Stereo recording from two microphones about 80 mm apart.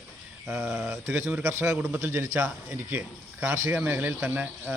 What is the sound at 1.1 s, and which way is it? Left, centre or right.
Speech, right.